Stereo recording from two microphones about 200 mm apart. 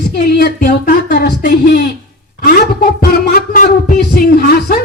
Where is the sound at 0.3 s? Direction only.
50° left (ahead or behind).